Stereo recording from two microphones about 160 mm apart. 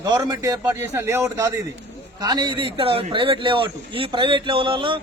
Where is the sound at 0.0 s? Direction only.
25° right (ahead or behind).